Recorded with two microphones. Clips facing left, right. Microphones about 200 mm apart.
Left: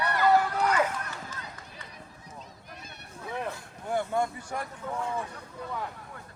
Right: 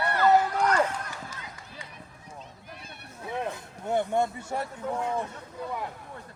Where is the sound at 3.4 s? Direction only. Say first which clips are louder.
Right 3 dB; 20° right (ahead or behind).